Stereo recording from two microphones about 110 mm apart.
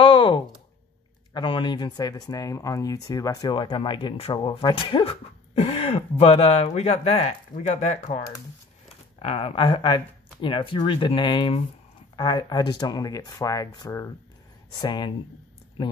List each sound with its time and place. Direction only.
0.0 s a sound: 50° left (ahead or behind)
1.3 s speech: 50° left (ahead or behind)
5.5 s speech: 60° left (ahead or behind); by 8.2 s 85° left
8.8 s speech: 60° left (ahead or behind); by 15.1 s 40° left (ahead or behind)